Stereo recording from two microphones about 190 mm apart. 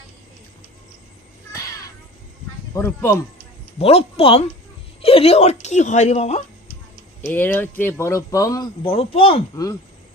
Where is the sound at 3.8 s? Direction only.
30° left (ahead or behind).